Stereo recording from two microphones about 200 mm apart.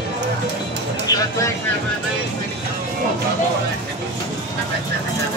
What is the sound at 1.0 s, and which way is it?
Speech, 20° left (ahead or behind).